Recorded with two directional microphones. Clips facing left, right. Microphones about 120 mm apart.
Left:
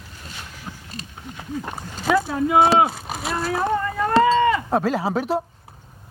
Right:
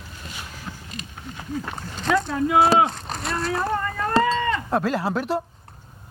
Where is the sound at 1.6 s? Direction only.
10° left (ahead or behind).